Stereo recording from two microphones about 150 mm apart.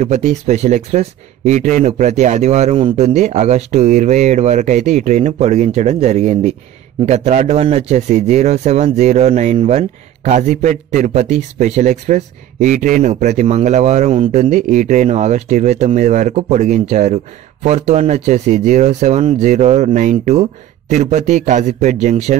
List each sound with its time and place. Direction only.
0.0 s a man's voice: 50° right (ahead or behind)